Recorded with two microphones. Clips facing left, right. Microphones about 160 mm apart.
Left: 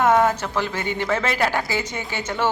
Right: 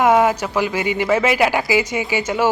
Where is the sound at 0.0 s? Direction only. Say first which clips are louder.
Right 3 dB; 10° right (ahead or behind).